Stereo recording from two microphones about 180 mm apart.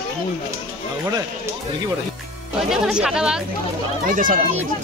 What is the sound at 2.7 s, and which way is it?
Speech, 5° right (ahead or behind).